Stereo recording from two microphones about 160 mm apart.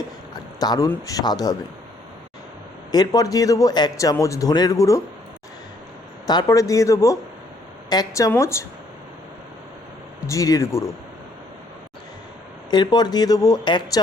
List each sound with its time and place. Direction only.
0.6 s a man's voice: 25° left (ahead or behind)
2.9 s a man's voice: 25° left (ahead or behind)
6.2 s a man's voice: 25° left (ahead or behind)
10.2 s a man's voice: 20° left (ahead or behind)
12.7 s a man's voice: 25° left (ahead or behind)